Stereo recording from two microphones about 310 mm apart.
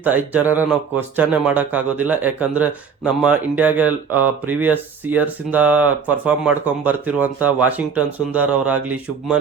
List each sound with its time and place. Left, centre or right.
0.0 s speech: centre